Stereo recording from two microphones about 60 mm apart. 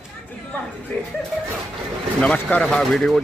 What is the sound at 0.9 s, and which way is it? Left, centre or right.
Speech, left.